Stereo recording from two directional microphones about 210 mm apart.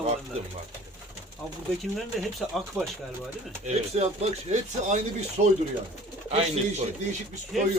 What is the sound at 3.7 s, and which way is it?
Speech, 30° right (ahead or behind).